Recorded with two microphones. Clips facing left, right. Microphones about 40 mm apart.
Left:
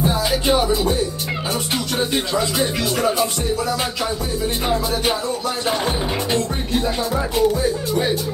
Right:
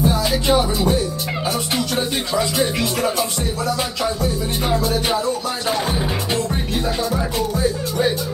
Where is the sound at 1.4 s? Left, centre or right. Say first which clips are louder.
Right 2 dB; centre.